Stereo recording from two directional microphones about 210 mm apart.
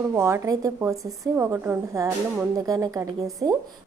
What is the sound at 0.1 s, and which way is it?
A woman's voice, 15° right (ahead or behind).